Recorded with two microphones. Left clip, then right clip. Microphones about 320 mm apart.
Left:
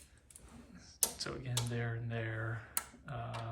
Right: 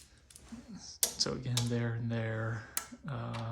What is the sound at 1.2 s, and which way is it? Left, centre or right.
Computer keyboard, centre.